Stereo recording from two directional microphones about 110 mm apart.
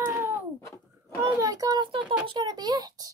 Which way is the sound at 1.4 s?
30° right (ahead or behind).